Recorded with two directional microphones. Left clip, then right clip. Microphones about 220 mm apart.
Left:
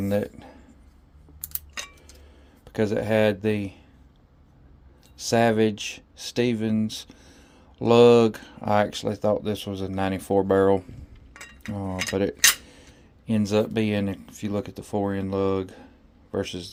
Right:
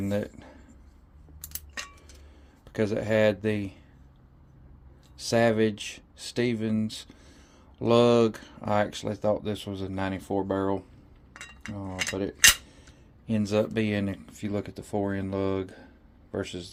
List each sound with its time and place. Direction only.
0.0 s a sound: 20° left (ahead or behind)
2.6 s speech: 15° left (ahead or behind)
5.1 s speech: 20° left (ahead or behind)
12.1 s cutlery: 30° left (ahead or behind)
13.2 s speech: 20° left (ahead or behind)